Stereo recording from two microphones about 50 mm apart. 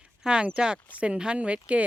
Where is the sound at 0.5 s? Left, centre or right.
Centre.